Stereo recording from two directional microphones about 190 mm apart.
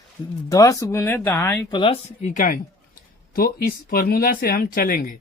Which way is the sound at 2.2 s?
40° left (ahead or behind).